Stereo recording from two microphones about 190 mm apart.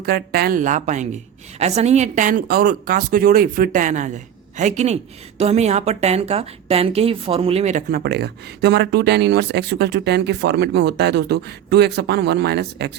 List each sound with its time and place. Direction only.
0.0 s a woman's voice: 55° right (ahead or behind)